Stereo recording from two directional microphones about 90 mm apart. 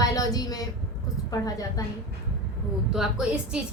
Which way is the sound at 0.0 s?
40° left (ahead or behind).